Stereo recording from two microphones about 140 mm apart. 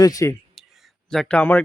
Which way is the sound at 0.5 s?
Centre (ahead or behind).